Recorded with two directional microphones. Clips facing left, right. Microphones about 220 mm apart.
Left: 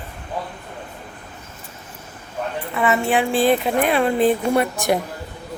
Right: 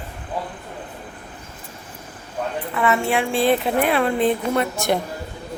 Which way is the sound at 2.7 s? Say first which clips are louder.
Left 1 dB; 20° left (ahead or behind).